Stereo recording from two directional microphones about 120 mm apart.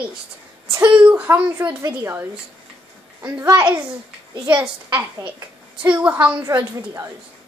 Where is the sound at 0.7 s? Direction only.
15° right (ahead or behind).